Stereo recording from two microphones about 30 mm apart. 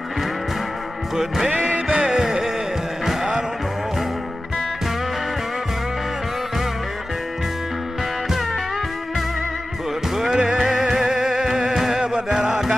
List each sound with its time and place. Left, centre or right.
1.5 s music: right
1.9 s music: right
10.3 s music: right